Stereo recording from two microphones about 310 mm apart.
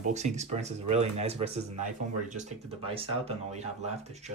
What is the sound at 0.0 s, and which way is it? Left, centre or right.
Speech, right.